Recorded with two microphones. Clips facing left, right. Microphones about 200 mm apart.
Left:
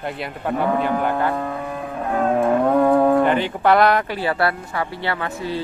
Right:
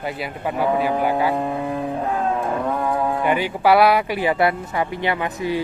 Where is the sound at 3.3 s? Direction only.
10° right (ahead or behind).